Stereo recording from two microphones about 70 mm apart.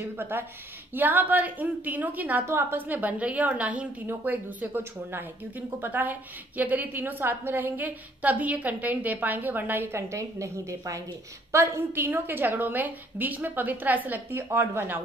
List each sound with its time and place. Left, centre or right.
0.0 s a woman's voice: right
2.4 s a woman's voice: right
2.9 s a woman's voice: right